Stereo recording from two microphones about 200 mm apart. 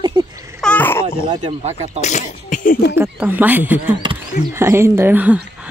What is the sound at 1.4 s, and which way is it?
Speech, 35° right (ahead or behind).